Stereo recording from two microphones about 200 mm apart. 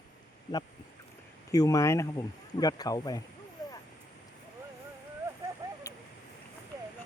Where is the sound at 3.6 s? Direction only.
20° left (ahead or behind).